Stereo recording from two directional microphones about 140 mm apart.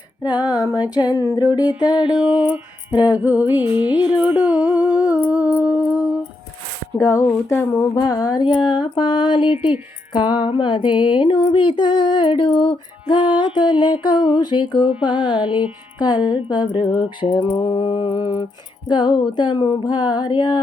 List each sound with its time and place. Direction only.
0.2 s female singing: 30° left (ahead or behind)
2.0 s music: 10° right (ahead or behind)
5.1 s humming: 10° right (ahead or behind)
6.9 s female singing: 20° left (ahead or behind)
8.6 s a sound: 35° left (ahead or behind)
16.0 s female singing: 30° left (ahead or behind)
16.9 s a sound: 40° left (ahead or behind)